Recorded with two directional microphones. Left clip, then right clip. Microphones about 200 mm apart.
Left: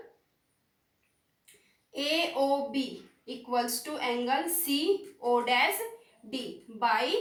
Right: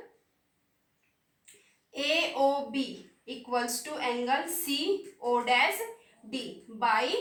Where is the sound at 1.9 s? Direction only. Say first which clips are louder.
Right 1 dB; 20° right (ahead or behind).